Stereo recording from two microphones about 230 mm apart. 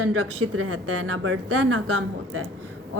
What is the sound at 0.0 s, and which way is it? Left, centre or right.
A woman's voice, right.